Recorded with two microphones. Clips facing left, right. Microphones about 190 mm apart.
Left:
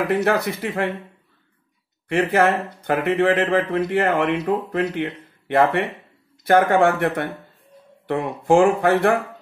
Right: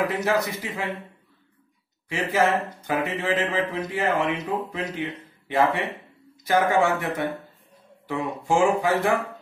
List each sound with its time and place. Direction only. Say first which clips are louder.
0.1 s a man's voice: left 4 dB; 60° left (ahead or behind)
2.0 s a man's voice: left 5 dB; 60° left (ahead or behind)